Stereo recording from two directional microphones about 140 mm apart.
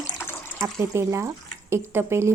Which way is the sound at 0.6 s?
20° right (ahead or behind).